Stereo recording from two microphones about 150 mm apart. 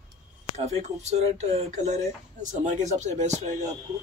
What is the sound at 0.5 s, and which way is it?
Speech, 45° right (ahead or behind).